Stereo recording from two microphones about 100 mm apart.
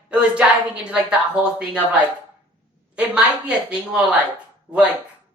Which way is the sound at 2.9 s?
10° right (ahead or behind).